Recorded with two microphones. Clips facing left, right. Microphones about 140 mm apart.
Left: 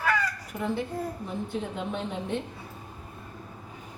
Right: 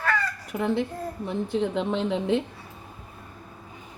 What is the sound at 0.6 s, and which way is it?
A woman's voice, 90° right.